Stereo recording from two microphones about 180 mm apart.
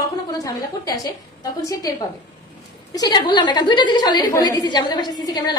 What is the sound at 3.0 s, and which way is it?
A woman's voice, 25° left (ahead or behind).